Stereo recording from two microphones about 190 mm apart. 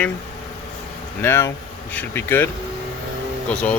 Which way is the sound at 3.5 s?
5° left (ahead or behind).